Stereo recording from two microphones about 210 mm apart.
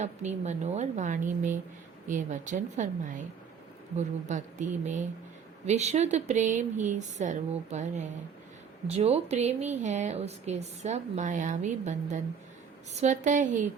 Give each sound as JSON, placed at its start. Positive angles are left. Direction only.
{"t": 0.0, "sound": "speech", "side_deg": -35}
{"t": 3.9, "sound": "speech", "side_deg": -35}